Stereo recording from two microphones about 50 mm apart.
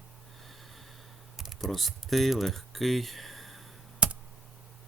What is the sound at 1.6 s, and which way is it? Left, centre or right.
Speech, centre.